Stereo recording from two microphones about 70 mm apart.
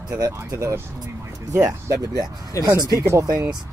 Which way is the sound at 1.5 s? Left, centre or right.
Right.